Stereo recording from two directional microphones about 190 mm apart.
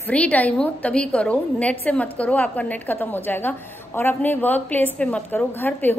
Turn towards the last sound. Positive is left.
turn(degrees=10)  # may be behind; listen again after turning